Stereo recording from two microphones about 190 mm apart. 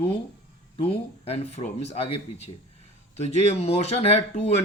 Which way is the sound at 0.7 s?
30° left (ahead or behind).